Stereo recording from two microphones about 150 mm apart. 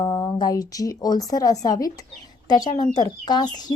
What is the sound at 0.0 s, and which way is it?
A woman's voice, 25° left (ahead or behind).